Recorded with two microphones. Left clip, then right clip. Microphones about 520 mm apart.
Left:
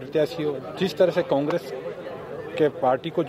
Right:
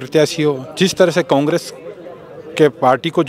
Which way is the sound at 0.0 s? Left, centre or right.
Right.